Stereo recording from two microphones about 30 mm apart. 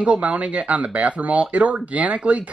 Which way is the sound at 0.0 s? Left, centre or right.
Right.